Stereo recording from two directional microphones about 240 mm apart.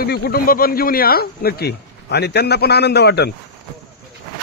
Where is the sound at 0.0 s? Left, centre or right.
Left.